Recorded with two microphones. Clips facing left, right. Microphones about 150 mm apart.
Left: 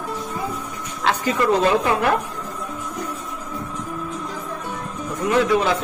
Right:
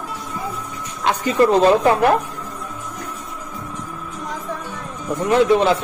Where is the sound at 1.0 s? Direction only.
25° right (ahead or behind).